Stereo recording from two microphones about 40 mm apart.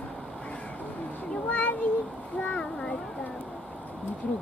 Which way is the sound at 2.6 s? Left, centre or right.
Left.